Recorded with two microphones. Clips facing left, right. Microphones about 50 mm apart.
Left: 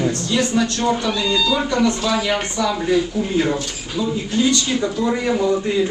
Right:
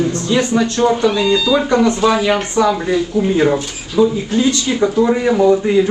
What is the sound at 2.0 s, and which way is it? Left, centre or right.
Speech, right.